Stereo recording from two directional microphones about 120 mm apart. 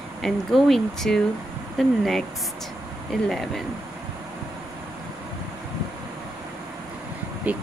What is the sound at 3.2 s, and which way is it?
Speech, 5° left (ahead or behind).